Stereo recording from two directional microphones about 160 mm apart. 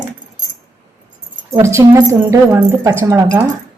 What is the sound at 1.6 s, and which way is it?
Speech, 20° right (ahead or behind).